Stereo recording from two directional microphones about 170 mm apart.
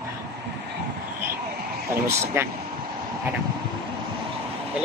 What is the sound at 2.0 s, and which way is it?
Speech, 15° right (ahead or behind).